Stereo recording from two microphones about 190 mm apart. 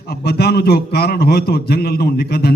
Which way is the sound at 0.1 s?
55° left (ahead or behind).